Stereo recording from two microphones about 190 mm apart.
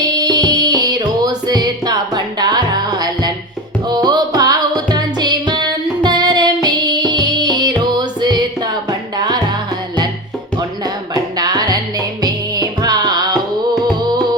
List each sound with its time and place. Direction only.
0.1 s music: 20° right (ahead or behind)
10.6 s music: 20° right (ahead or behind)